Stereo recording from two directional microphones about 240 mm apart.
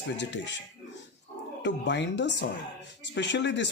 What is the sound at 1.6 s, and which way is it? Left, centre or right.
Speech, left.